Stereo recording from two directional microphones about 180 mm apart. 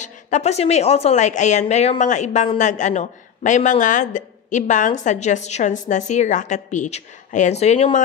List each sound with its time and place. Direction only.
0.0 s a woman's voice: 40° left (ahead or behind)